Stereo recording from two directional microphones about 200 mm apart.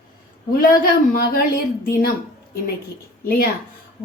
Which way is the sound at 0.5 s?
45° left (ahead or behind).